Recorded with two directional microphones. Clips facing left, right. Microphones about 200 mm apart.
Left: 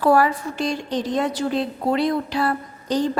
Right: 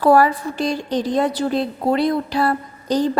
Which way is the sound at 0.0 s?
40° right (ahead or behind).